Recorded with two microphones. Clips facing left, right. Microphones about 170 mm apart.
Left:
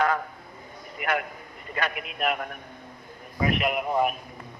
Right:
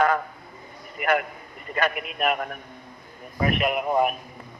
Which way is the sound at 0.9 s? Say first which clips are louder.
Right 4 dB; 50° right (ahead or behind).